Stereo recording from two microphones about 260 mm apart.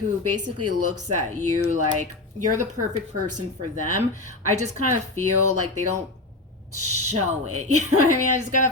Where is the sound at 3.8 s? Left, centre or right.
Left.